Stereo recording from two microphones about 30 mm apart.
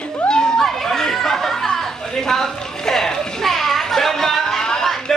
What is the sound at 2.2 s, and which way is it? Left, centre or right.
Music, centre.